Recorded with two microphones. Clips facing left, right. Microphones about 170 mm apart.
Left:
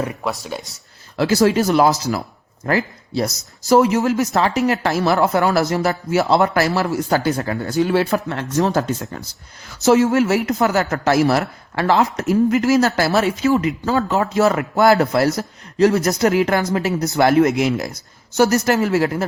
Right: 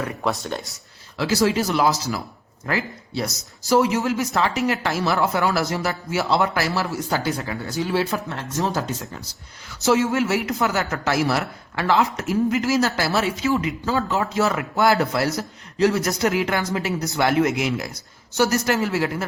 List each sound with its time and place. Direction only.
0.2 s speech: 5° left (ahead or behind)
1.1 s speech: 50° left (ahead or behind)